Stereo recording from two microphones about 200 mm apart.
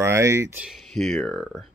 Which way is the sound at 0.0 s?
15° right (ahead or behind).